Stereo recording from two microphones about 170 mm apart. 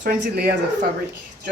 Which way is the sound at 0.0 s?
70° right (ahead or behind).